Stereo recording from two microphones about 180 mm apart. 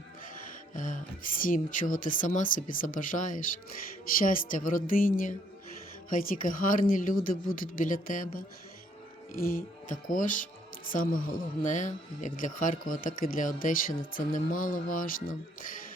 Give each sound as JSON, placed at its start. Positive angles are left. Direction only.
{"t": 0.8, "sound": "speech", "side_deg": 50}